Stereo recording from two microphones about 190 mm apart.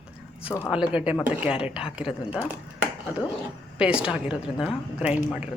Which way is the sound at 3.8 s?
5° right (ahead or behind).